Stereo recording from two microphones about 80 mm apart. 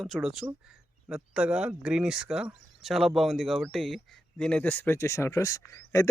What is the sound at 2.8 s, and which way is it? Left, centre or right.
A man's voice, centre.